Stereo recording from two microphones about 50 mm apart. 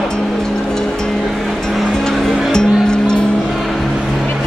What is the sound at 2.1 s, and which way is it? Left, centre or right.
Music, centre.